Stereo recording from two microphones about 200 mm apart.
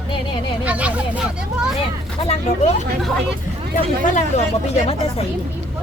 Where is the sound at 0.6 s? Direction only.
5° right (ahead or behind).